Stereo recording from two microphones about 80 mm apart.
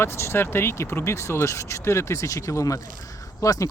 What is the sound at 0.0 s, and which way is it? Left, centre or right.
Speech, left.